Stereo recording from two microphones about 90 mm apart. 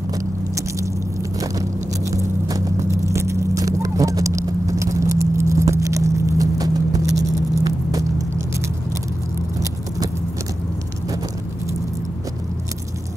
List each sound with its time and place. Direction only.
1.4 s biting: 40° right (ahead or behind)
2.4 s vehicle: 35° right (ahead or behind)